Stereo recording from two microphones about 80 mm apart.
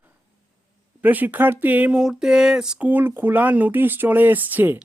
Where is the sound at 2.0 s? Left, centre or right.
Centre.